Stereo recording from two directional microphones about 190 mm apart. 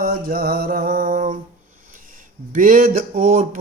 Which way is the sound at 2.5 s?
45° right (ahead or behind).